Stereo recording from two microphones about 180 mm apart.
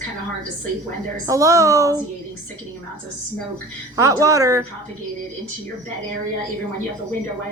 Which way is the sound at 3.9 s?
15° right (ahead or behind).